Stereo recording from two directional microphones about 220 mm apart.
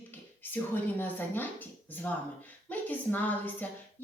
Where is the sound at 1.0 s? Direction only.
10° left (ahead or behind).